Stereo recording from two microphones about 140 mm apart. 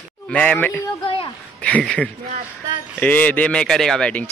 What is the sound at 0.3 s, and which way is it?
Speech, 10° left (ahead or behind).